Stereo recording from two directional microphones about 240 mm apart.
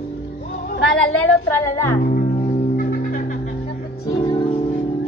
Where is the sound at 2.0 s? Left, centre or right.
Left.